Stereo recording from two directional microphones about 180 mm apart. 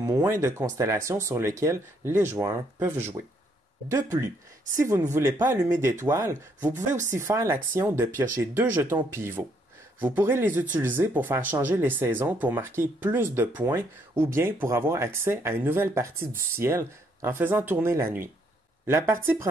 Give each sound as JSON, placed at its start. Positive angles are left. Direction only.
{"t": 0.0, "sound": "speech", "side_deg": -15}
{"t": 4.7, "sound": "speech", "side_deg": -15}